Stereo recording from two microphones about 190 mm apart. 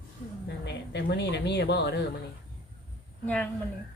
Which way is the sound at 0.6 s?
65° left (ahead or behind).